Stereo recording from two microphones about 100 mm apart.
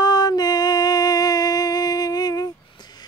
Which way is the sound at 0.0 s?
40° left (ahead or behind).